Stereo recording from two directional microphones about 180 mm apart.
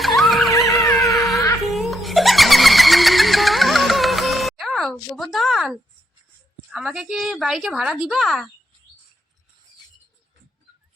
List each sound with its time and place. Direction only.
0.0 s music: centre (ahead or behind)
0.9 s dog: 15° left (ahead or behind)
1.7 s a sound: centre (ahead or behind)
6.7 s a woman's voice: 5° right (ahead or behind)